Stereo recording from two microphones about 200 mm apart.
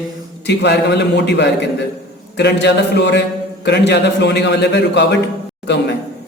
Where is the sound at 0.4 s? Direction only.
60° left (ahead or behind).